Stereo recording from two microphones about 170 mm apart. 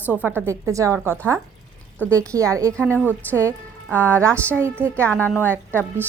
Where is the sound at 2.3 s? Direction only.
20° right (ahead or behind).